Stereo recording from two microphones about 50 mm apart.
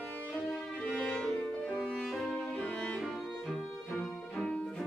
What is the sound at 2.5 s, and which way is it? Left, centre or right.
Music, left.